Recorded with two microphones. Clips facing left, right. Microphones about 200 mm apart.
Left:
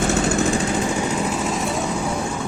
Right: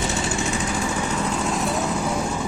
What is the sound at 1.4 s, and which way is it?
Lawn mower, centre (ahead or behind).